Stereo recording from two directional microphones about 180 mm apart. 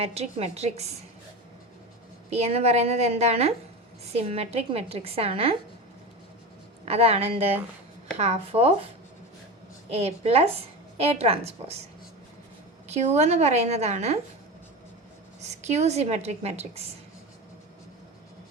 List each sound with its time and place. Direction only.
0.0 s a woman's voice: 35° right (ahead or behind)
2.3 s a woman's voice: 35° right (ahead or behind)
6.8 s a woman's voice: 35° right (ahead or behind)
9.9 s a woman's voice: 35° right (ahead or behind)
12.9 s a woman's voice: 35° right (ahead or behind)
15.6 s a woman's voice: 40° right (ahead or behind)